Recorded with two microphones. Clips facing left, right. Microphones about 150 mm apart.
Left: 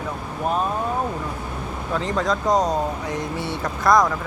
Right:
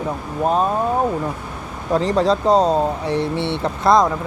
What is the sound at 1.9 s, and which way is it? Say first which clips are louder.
Speech: right 7 dB; 35° right (ahead or behind).